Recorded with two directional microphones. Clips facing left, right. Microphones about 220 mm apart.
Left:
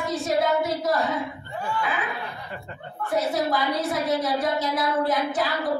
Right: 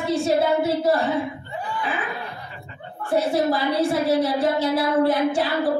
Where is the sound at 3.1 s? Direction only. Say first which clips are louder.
Right 4 dB; 30° right (ahead or behind).